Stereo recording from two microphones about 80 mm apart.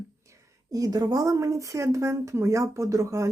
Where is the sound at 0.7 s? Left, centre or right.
Right.